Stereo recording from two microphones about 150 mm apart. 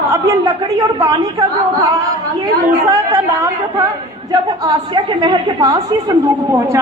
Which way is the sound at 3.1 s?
20° right (ahead or behind).